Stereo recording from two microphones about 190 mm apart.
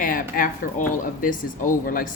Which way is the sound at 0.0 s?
45° left (ahead or behind).